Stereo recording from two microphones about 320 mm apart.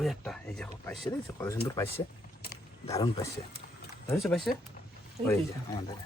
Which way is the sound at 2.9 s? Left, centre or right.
Centre.